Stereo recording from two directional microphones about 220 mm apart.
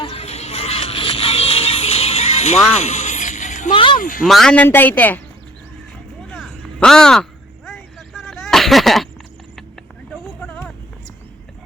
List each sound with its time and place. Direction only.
0.0 s music: 25° left (ahead or behind)
2.7 s a sound: 30° left (ahead or behind)
3.9 s speech: 40° left (ahead or behind)
4.3 s a man's voice: centre (ahead or behind)
6.3 s crow: centre (ahead or behind)
10.4 s vehicle: 5° left (ahead or behind)